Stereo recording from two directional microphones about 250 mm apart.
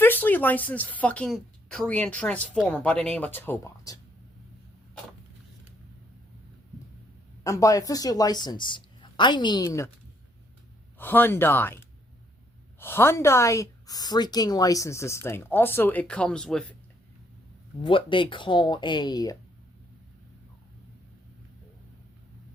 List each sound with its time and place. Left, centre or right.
0.0 s a woman's voice: centre
7.4 s a woman's voice: centre
10.9 s a woman's voice: centre
12.8 s a woman's voice: centre
17.8 s speech: centre